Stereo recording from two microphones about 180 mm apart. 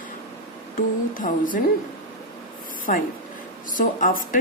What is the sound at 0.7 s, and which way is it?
Speech, 50° left (ahead or behind).